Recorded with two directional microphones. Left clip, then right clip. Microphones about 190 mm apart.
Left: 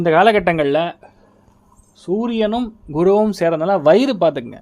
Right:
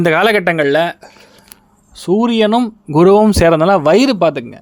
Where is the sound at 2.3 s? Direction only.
25° right (ahead or behind).